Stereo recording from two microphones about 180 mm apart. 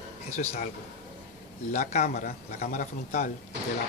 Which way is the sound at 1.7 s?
40° left (ahead or behind).